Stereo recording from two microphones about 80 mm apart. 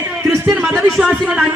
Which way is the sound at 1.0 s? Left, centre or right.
Centre.